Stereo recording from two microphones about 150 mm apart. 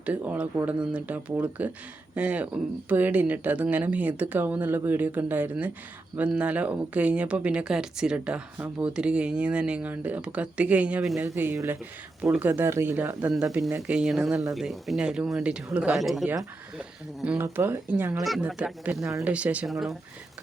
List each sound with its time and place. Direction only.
0.0 s speech: 10° right (ahead or behind)
17.3 s speech: 15° right (ahead or behind); by 20.0 s centre (ahead or behind)